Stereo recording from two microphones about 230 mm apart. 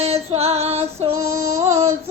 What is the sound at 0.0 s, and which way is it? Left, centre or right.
Female singing, right.